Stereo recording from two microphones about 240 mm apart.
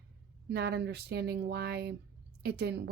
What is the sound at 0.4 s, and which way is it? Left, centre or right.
Speech, right.